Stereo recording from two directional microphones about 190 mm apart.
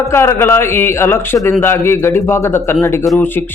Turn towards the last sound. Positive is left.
turn(degrees=10)  # may be behind; listen again after turning